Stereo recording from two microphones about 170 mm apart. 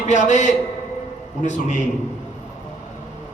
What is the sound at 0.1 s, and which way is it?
A woman's voice, 45° left (ahead or behind).